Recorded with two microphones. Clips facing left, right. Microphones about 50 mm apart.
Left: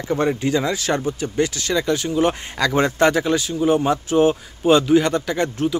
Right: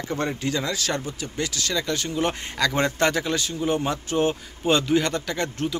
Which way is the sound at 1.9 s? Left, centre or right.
Centre.